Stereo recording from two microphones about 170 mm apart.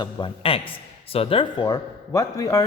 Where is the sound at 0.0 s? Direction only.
30° left (ahead or behind).